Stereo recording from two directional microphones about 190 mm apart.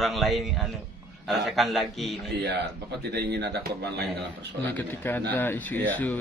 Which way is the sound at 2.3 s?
60° right (ahead or behind).